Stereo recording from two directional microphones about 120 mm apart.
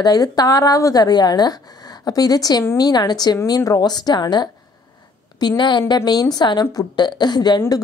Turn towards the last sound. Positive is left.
turn(degrees=35)  # may be behind; listen again after turning